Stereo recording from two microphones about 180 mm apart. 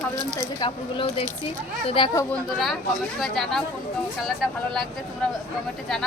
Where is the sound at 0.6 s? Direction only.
30° left (ahead or behind).